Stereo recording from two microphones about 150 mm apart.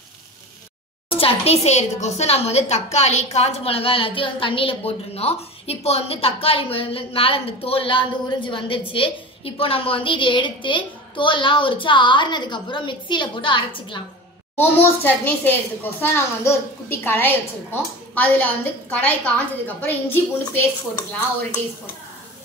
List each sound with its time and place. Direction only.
1.1 s a woman's voice: 40° left (ahead or behind)
14.6 s a child's voice: 15° left (ahead or behind)